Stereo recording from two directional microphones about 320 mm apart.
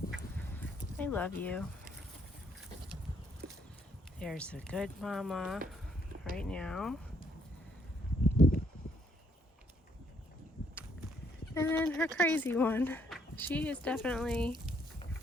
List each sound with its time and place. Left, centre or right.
0.1 s goose: centre
3.4 s a sound: right
4.2 s speech: centre
11.5 s speech: centre